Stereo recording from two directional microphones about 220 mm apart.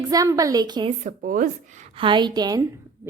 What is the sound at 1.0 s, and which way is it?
A woman's voice, 35° right (ahead or behind).